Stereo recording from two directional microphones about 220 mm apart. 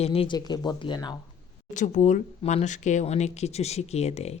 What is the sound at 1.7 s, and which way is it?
Speech, 35° left (ahead or behind).